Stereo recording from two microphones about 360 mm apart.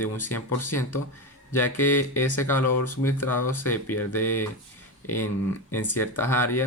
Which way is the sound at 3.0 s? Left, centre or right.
Centre.